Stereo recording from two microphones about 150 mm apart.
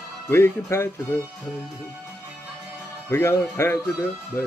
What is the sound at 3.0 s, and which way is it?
A man's voice, 15° left (ahead or behind).